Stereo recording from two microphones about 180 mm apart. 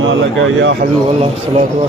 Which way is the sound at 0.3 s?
90° right.